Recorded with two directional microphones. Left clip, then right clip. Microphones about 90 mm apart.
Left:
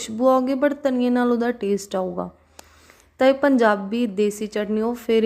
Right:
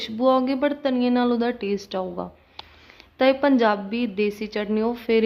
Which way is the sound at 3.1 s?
45° left (ahead or behind).